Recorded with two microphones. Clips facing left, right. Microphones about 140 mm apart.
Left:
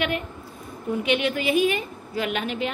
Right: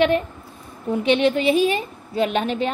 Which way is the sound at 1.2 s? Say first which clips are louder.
Right 4 dB; 25° right (ahead or behind).